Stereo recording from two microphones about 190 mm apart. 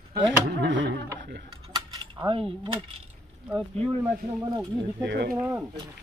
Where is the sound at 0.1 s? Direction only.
70° right (ahead or behind).